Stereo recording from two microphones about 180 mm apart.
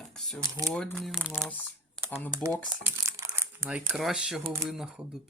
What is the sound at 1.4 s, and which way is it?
Crumpling, 10° left (ahead or behind).